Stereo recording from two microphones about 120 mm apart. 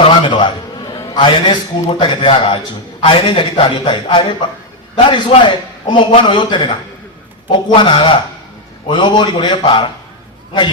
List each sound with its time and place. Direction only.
0.0 s a sound: 40° left (ahead or behind)
1.1 s a man's voice: 40° left (ahead or behind)
7.8 s a man's voice: 40° left (ahead or behind)